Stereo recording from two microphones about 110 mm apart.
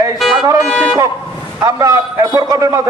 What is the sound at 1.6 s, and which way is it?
A man's voice, 35° right (ahead or behind).